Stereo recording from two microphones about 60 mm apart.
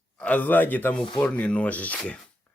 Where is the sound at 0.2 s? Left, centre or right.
Left.